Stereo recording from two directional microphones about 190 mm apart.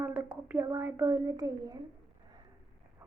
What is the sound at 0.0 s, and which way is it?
A woman's voice, 10° right (ahead or behind).